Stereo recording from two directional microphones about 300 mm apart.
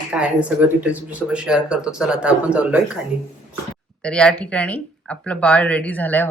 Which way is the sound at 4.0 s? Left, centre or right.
Centre.